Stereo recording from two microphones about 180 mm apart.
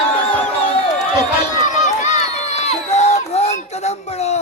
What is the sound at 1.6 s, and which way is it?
Crowd, 40° left (ahead or behind).